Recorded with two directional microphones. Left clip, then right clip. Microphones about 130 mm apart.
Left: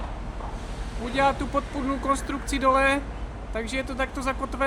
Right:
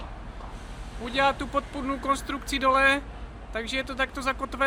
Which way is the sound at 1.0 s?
20° right (ahead or behind).